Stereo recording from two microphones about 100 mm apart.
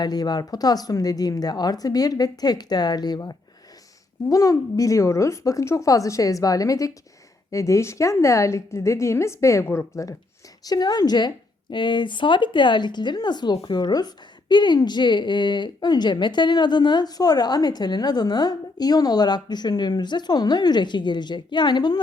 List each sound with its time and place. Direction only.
0.0 s a woman's voice: 45° left (ahead or behind)